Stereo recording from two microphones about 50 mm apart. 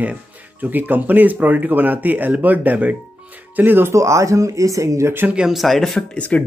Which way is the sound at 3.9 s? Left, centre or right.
Right.